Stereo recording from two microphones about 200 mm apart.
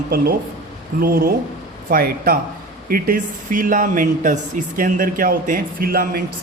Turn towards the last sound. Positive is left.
turn(degrees=-50)  # may be behind; listen again after turning